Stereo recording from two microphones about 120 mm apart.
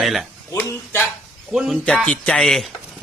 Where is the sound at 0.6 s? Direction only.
15° left (ahead or behind).